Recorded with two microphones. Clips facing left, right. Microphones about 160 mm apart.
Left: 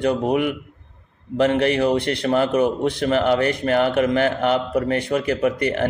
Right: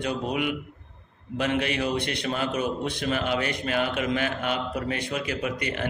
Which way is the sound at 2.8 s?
65° left (ahead or behind).